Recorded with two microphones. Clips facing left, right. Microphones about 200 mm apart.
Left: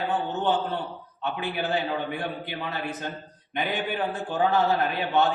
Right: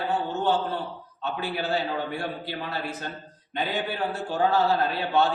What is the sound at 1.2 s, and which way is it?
A man's voice, 20° left (ahead or behind).